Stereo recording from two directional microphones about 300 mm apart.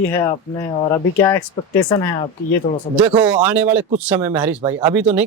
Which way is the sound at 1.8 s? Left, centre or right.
Centre.